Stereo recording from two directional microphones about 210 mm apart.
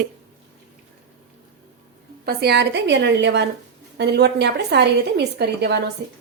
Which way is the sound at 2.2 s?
50° right (ahead or behind).